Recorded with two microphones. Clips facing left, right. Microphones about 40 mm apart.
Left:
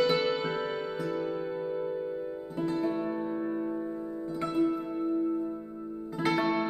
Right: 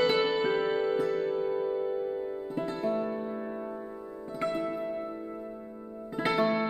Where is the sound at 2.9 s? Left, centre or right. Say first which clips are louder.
Even; centre.